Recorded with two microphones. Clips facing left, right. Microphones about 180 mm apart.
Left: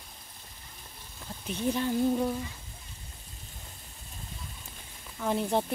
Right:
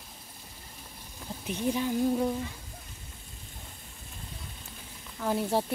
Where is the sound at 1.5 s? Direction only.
10° right (ahead or behind).